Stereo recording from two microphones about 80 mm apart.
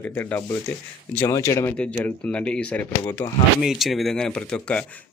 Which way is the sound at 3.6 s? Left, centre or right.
Centre.